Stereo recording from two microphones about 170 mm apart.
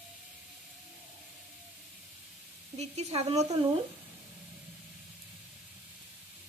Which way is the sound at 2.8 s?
40° right (ahead or behind).